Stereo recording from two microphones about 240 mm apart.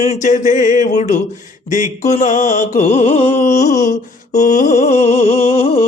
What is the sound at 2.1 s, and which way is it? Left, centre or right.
Music, left.